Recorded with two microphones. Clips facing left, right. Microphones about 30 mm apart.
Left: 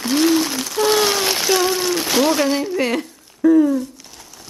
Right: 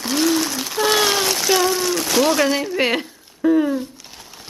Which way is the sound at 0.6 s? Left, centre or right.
Centre.